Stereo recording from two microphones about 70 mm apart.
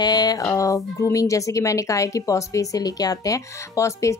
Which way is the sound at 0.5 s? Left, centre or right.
Left.